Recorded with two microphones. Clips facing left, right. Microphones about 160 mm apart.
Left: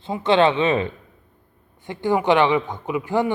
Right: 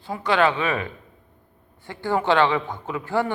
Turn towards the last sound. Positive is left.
turn(degrees=15)  # may be behind; listen again after turning